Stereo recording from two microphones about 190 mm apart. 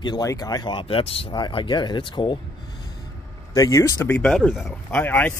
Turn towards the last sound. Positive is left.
turn(degrees=10)  # may be behind; listen again after turning